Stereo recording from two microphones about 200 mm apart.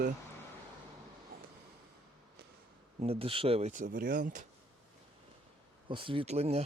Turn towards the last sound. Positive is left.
turn(degrees=-30)  # may be behind; listen again after turning